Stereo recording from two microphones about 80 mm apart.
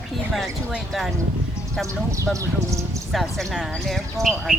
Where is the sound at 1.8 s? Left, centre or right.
Right.